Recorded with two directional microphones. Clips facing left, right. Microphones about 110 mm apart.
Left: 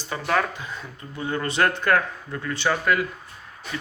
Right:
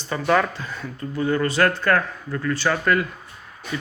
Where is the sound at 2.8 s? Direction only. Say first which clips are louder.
Right 2 dB; 5° left (ahead or behind).